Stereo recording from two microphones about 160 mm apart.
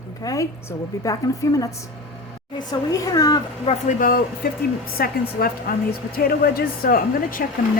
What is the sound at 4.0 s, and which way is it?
Speech, 65° left (ahead or behind).